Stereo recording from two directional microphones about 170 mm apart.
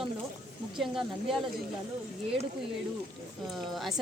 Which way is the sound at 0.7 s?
Centre (ahead or behind).